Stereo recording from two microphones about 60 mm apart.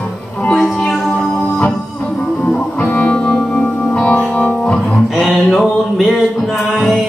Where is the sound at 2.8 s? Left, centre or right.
Centre.